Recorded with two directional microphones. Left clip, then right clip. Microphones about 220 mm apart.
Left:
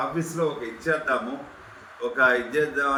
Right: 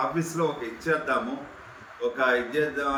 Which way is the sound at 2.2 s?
15° left (ahead or behind).